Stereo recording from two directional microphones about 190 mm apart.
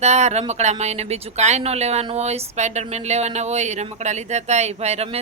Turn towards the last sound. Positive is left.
turn(degrees=-35)  # may be behind; listen again after turning